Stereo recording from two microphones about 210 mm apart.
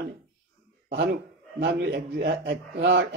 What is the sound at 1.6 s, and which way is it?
A man's voice, 55° right (ahead or behind).